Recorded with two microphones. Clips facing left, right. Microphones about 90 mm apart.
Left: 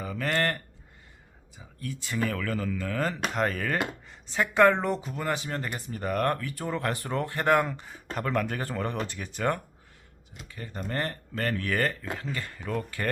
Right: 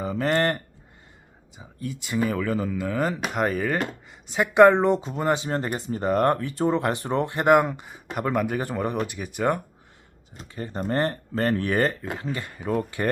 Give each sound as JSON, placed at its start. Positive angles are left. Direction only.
{"t": 0.0, "sound": "speech", "side_deg": -25}
{"t": 10.3, "sound": "speech", "side_deg": -30}